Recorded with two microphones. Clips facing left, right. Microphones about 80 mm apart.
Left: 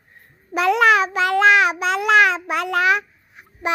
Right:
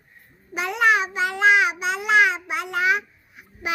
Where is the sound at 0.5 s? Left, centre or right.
Left.